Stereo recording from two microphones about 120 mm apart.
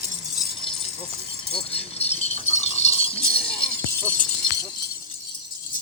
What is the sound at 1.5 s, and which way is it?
Rattle, 55° left (ahead or behind).